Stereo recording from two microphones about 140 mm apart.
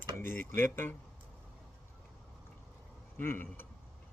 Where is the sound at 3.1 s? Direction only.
15° left (ahead or behind).